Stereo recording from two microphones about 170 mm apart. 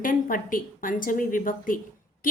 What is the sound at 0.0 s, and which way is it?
A woman's voice, 55° left (ahead or behind).